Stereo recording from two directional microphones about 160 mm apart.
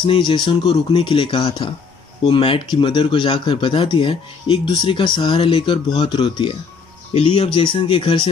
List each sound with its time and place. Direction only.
0.0 s speech: 30° left (ahead or behind)